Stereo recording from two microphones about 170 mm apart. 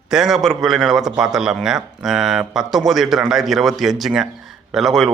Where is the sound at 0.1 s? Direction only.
Centre (ahead or behind).